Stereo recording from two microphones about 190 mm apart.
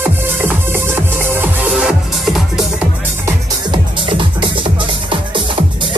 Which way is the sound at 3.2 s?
25° right (ahead or behind).